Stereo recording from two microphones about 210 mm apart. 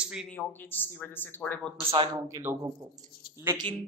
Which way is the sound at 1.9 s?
20° right (ahead or behind).